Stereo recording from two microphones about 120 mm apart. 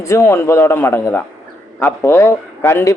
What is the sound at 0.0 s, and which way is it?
Speech, 20° left (ahead or behind).